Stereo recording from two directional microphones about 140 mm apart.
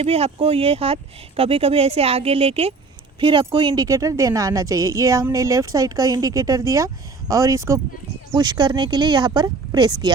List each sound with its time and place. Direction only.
0.0 s speech: 45° right (ahead or behind); by 10.1 s 30° right (ahead or behind)